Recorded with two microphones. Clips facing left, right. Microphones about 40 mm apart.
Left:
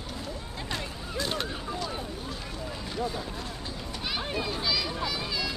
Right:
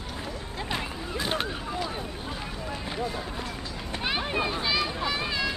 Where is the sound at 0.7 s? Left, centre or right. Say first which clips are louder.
Right 3 dB; right.